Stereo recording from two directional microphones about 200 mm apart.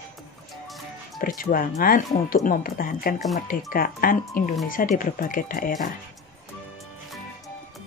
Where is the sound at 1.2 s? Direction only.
45° left (ahead or behind).